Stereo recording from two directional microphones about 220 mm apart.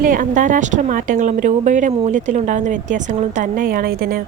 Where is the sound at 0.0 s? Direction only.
35° right (ahead or behind).